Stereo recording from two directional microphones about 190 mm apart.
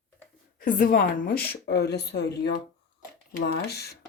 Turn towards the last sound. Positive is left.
turn(degrees=55)  # may be behind; listen again after turning